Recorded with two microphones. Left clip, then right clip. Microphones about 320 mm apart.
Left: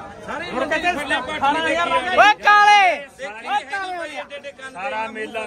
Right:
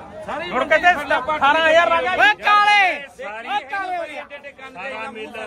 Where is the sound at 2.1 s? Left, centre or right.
Centre.